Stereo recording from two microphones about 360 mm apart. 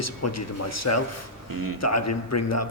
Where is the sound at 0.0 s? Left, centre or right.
Left.